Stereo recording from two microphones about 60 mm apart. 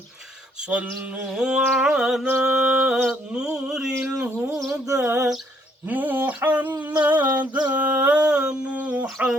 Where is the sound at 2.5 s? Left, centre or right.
Right.